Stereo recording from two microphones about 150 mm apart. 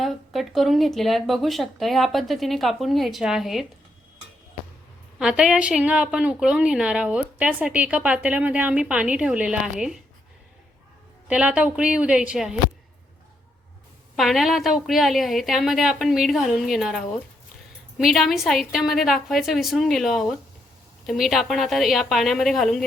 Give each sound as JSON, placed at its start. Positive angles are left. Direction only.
{"t": 0.0, "sound": "speech", "side_deg": 0}
{"t": 5.2, "sound": "a woman's voice", "side_deg": -5}
{"t": 11.3, "sound": "a woman's voice", "side_deg": -10}
{"t": 14.2, "sound": "speech", "side_deg": 0}